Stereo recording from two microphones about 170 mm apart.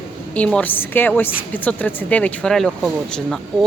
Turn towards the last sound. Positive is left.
turn(degrees=0)  # may be behind; listen again after turning